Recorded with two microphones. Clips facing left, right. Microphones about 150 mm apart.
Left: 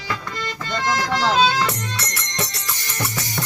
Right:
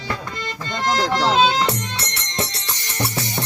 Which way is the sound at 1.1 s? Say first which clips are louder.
Even; 20° right (ahead or behind).